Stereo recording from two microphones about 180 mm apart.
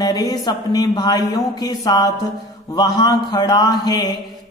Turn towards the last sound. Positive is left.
turn(degrees=20)  # may be behind; listen again after turning